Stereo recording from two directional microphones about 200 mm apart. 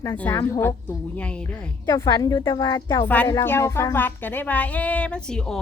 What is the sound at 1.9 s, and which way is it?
A woman's voice, 20° left (ahead or behind).